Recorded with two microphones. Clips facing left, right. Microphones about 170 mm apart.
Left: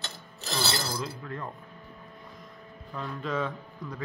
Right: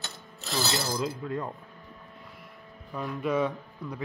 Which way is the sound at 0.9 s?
15° right (ahead or behind).